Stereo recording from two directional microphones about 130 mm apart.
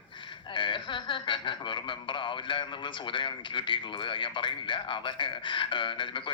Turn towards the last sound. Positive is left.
turn(degrees=40)  # may be behind; listen again after turning